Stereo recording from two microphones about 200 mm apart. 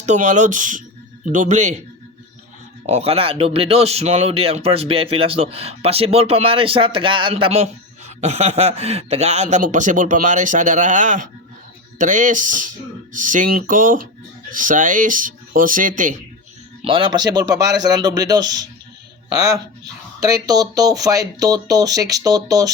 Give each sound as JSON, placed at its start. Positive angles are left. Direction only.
{"t": 0.0, "sound": "speech", "side_deg": -35}
{"t": 2.8, "sound": "speech", "side_deg": -30}
{"t": 16.8, "sound": "a man's voice", "side_deg": -25}
{"t": 20.1, "sound": "speech", "side_deg": -15}